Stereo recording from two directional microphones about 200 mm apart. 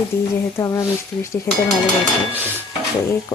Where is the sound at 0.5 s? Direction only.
15° left (ahead or behind).